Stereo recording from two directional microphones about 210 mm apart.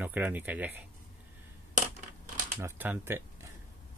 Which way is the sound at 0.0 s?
10° right (ahead or behind).